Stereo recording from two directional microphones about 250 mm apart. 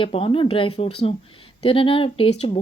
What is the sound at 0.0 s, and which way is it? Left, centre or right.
A woman's voice, left.